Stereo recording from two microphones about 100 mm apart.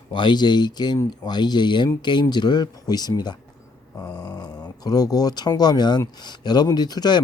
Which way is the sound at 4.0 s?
15° left (ahead or behind).